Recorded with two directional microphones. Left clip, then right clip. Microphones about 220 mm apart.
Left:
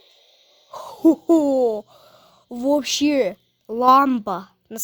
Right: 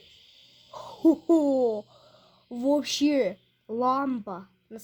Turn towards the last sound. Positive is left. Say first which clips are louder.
# left 11 dB
turn(degrees=45)  # may be behind; listen again after turning